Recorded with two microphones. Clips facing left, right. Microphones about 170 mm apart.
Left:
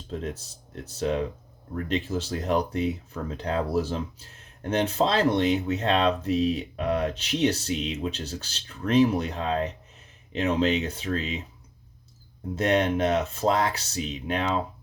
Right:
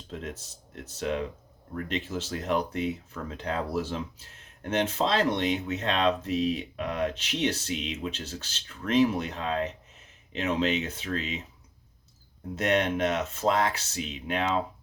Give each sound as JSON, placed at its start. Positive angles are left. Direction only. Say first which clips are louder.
{"t": 0.1, "sound": "speech", "louder": "left 5 dB", "side_deg": 35}
{"t": 12.5, "sound": "speech", "louder": "left 3 dB", "side_deg": 35}